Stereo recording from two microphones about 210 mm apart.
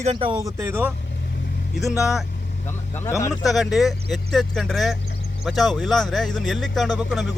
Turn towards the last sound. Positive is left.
turn(degrees=0)  # may be behind; listen again after turning